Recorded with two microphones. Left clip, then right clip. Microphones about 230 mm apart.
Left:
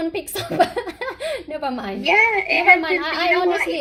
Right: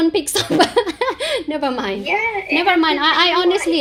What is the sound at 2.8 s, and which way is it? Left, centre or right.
Speech, centre.